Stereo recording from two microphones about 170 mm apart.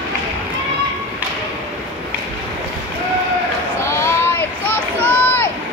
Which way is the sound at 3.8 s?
15° left (ahead or behind).